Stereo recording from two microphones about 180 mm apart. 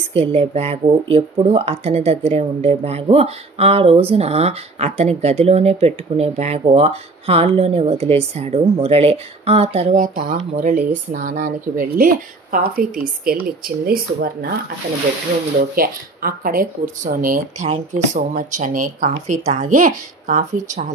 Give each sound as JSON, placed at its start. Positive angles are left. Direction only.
{"t": 0.1, "sound": "speech", "side_deg": -35}
{"t": 9.9, "sound": "speech", "side_deg": -50}
{"t": 15.7, "sound": "speech", "side_deg": -55}